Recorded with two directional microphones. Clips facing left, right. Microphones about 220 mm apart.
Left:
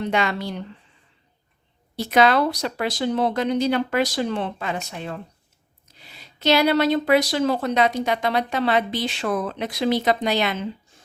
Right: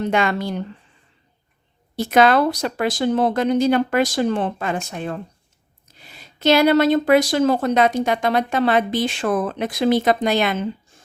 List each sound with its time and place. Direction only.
0.0 s speech: 50° right (ahead or behind)
2.0 s speech: 50° right (ahead or behind)